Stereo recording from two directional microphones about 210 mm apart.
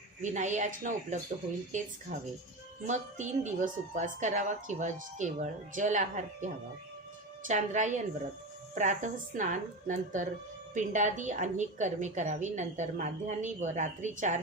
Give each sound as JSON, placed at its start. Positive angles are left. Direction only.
{"t": 0.2, "sound": "a woman's voice", "side_deg": -35}